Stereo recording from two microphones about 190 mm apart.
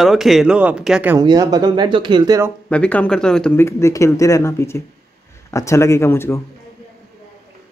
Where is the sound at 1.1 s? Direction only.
20° right (ahead or behind).